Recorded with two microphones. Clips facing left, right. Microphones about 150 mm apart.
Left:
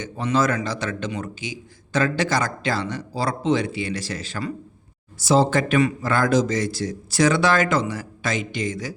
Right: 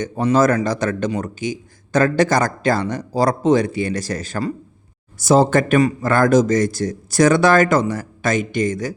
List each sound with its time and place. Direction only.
0.0 s a man's voice: 45° right (ahead or behind)